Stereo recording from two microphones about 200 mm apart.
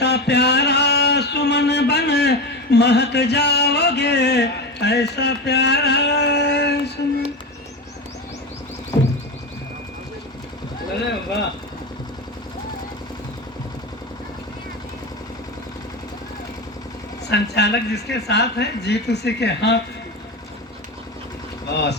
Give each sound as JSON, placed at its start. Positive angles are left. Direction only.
{"t": 0.0, "sound": "a sound", "side_deg": 55}
{"t": 8.9, "sound": "music", "side_deg": 20}
{"t": 17.2, "sound": "speech", "side_deg": 55}
{"t": 21.7, "sound": "speech", "side_deg": 55}